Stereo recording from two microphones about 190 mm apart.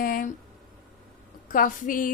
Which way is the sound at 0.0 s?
50° left (ahead or behind).